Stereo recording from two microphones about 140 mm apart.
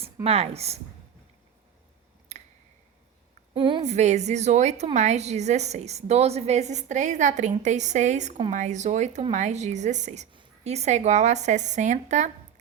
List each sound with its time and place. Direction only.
0.3 s speech: 45° right (ahead or behind)
2.3 s a sound: 50° right (ahead or behind)
3.5 s a woman's voice: 35° right (ahead or behind)
3.8 s a woman's voice: 55° right (ahead or behind)